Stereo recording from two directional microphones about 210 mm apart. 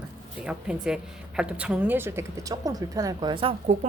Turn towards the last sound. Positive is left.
turn(degrees=-30)  # may be behind; listen again after turning